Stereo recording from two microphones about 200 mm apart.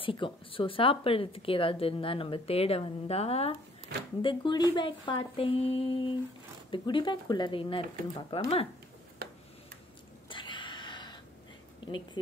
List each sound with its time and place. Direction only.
0.0 s speech: 25° left (ahead or behind)
9.2 s tick-tock: 50° right (ahead or behind)
10.3 s a sound: 25° left (ahead or behind)
11.8 s speech: 25° left (ahead or behind)